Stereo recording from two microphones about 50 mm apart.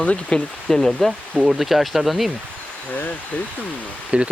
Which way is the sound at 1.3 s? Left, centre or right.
Centre.